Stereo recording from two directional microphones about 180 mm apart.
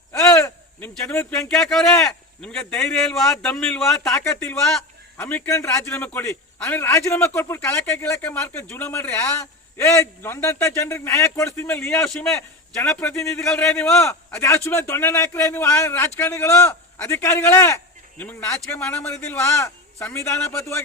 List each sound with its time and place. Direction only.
0.1 s a sound: 15° left (ahead or behind)
1.5 s a man's voice: centre (ahead or behind)
4.1 s a man's voice: 15° left (ahead or behind)